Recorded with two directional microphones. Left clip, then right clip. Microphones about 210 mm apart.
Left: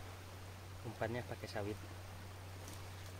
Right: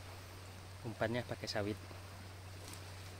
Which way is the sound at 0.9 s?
45° right (ahead or behind).